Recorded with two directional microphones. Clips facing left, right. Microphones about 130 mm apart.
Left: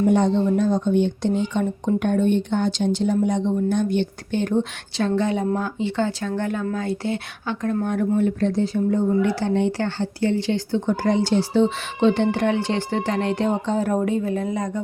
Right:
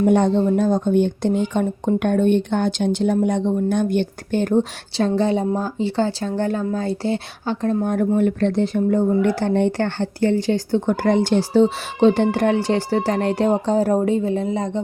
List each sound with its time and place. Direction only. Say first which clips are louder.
0.0 s speech: right 2 dB; 60° right (ahead or behind)
0.3 s speech: right 2 dB; 45° right (ahead or behind)
4.9 s speech: right 3 dB; 30° right (ahead or behind)
8.1 s speech: right 1 dB; 65° right (ahead or behind); by 14.8 s 25° right (ahead or behind)